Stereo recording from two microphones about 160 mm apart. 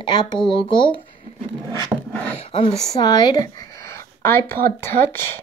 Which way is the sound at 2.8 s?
25° left (ahead or behind).